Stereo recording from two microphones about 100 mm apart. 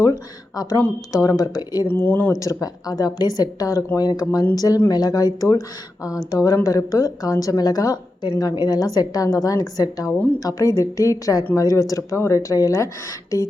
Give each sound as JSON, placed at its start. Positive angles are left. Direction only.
{"t": 0.0, "sound": "speech", "side_deg": 35}
{"t": 1.9, "sound": "speech", "side_deg": 20}
{"t": 2.4, "sound": "speech", "side_deg": 35}